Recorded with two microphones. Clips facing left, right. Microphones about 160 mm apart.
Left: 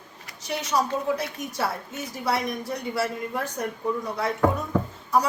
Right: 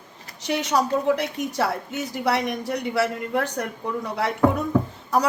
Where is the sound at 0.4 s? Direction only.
70° right (ahead or behind).